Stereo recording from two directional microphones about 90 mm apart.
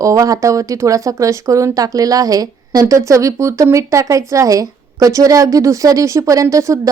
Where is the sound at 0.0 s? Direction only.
40° right (ahead or behind).